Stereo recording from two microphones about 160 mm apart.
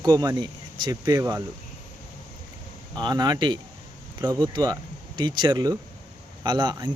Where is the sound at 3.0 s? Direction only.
25° right (ahead or behind).